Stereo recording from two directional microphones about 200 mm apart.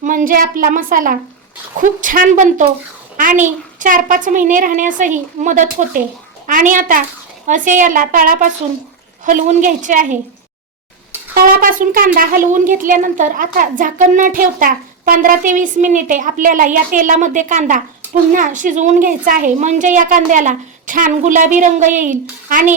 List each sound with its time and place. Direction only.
0.0 s a woman's voice: 40° right (ahead or behind)
11.3 s speech: 45° right (ahead or behind)